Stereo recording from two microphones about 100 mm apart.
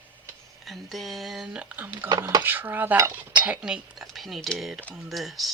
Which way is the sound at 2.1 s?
35° right (ahead or behind).